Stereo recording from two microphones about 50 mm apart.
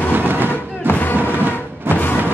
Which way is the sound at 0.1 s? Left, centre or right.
Right.